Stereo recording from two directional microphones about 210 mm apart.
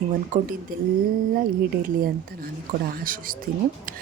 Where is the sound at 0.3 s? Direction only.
35° right (ahead or behind).